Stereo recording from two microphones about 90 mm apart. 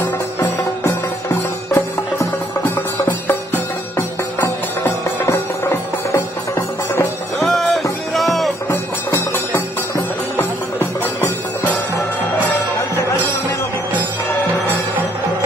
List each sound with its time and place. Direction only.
0.8 s music: 35° left (ahead or behind)
2.1 s music: 20° left (ahead or behind)
7.4 s music: centre (ahead or behind)
9.3 s music: 20° left (ahead or behind)
12.3 s music: 20° left (ahead or behind)